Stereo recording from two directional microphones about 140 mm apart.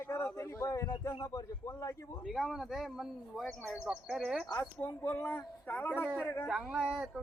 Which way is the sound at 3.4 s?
15° left (ahead or behind).